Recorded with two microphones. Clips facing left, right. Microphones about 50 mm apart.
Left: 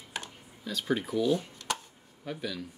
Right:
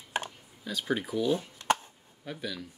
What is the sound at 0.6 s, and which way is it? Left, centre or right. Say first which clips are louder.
Speech: left 1 dB; centre.